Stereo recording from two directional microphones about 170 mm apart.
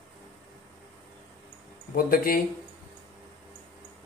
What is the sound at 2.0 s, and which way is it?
Speech, 60° left (ahead or behind).